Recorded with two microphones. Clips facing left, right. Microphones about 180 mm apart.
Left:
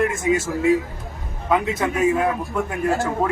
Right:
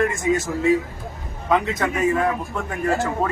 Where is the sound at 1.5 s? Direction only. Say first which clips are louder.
Even; 10° left (ahead or behind).